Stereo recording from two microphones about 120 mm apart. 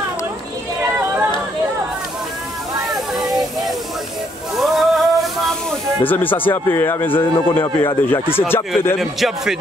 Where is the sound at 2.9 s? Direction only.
Centre (ahead or behind).